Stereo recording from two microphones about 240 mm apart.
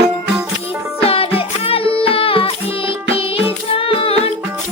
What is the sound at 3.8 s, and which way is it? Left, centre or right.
Singing, left.